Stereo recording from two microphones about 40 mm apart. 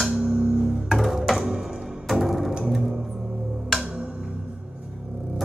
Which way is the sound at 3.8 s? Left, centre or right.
Centre.